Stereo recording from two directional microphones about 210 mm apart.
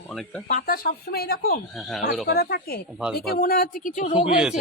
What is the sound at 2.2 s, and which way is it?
Speech, 50° left (ahead or behind).